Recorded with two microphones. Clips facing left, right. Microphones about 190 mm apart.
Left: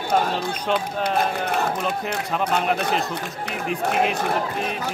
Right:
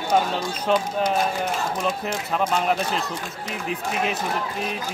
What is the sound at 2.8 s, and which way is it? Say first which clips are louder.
Speech: left 3 dB; 60° left (ahead or behind).